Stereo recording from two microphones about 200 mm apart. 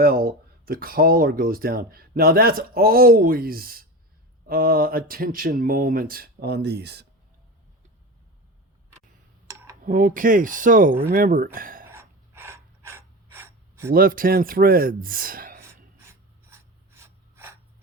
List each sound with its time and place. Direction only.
0.0 s speech: 45° right (ahead or behind)
9.8 s speech: 45° right (ahead or behind)
11.9 s mechanisms: 10° right (ahead or behind)
13.9 s speech: 45° right (ahead or behind)
16.0 s filing: 10° right (ahead or behind)